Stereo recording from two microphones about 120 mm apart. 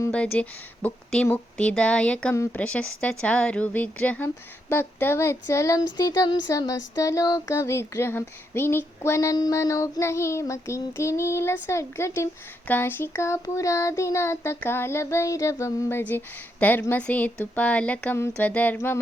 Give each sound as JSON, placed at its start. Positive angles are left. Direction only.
{"t": 0.1, "sound": "speech", "side_deg": 10}
{"t": 2.3, "sound": "speech", "side_deg": 20}
{"t": 2.6, "sound": "speech", "side_deg": 10}